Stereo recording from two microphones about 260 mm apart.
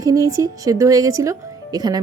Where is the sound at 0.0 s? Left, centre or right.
Centre.